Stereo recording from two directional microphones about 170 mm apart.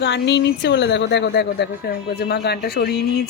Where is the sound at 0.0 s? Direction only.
90° left; by 2.9 s 70° left (ahead or behind).